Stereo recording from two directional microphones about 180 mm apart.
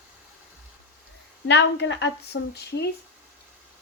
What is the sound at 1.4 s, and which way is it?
A woman's voice, 75° left (ahead or behind).